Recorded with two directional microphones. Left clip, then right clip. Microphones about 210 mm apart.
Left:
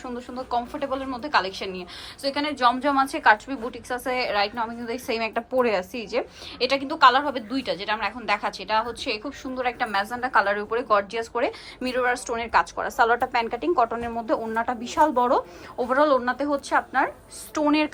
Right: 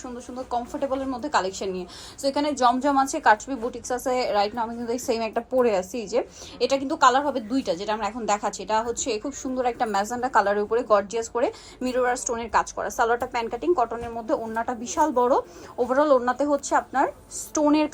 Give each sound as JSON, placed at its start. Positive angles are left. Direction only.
{"t": 0.3, "sound": "a woman's voice", "side_deg": -20}